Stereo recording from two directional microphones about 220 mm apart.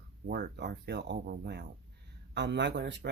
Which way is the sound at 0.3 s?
45° right (ahead or behind).